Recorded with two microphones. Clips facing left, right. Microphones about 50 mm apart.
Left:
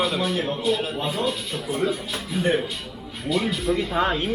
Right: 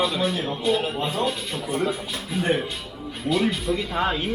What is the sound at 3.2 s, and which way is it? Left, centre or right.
Speech, centre.